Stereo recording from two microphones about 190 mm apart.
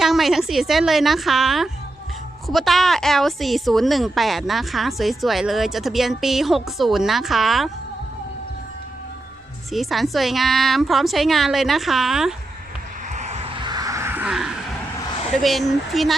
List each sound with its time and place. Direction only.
0.0 s a woman's voice: centre (ahead or behind)
9.7 s a woman's voice: centre (ahead or behind)
13.1 s a sound: 35° right (ahead or behind); by 14.5 s 5° right (ahead or behind)
15.4 s a woman's voice: centre (ahead or behind)